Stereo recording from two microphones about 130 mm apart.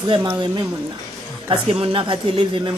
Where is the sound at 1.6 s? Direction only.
45° right (ahead or behind).